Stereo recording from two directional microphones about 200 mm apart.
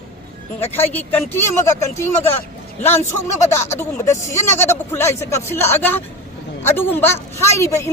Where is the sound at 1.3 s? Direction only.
15° left (ahead or behind).